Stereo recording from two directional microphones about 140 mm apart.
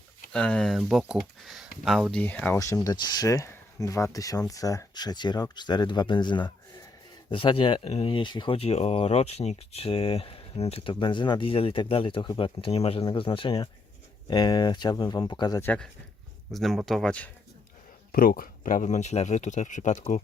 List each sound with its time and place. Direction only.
0.3 s speech: 5° left (ahead or behind)
2.2 s speech: 15° left (ahead or behind)
2.8 s speech: 30° left (ahead or behind)
15.6 s speech: 10° left (ahead or behind)
16.5 s speech: centre (ahead or behind)
18.1 s speech: 90° left; by 20.2 s 60° left (ahead or behind)